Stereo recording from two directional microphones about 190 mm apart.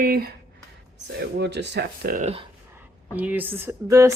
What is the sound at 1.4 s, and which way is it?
Speech, 65° right (ahead or behind).